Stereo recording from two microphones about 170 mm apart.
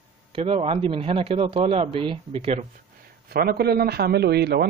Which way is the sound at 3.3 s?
65° right (ahead or behind).